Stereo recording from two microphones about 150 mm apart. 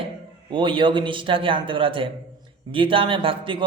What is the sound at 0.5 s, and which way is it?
Mantra, 35° right (ahead or behind).